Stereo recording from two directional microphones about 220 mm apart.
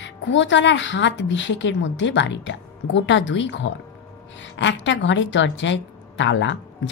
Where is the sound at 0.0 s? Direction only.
55° left (ahead or behind).